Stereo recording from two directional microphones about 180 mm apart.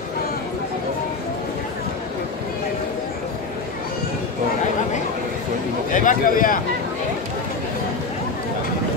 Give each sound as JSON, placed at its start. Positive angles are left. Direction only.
{"t": 5.9, "sound": "a man's voice", "side_deg": 45}